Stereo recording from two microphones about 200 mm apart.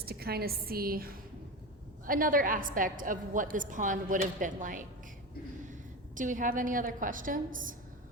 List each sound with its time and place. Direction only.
0.0 s a woman's voice: 50° right (ahead or behind)
6.1 s a woman's voice: 40° right (ahead or behind)